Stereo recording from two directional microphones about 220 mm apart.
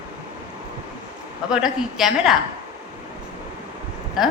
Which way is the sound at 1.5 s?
Centre (ahead or behind).